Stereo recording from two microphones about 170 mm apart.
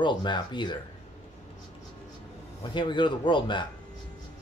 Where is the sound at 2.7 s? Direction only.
30° left (ahead or behind).